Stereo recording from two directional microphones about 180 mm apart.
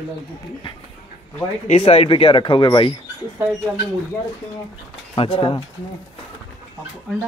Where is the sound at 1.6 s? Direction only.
35° left (ahead or behind).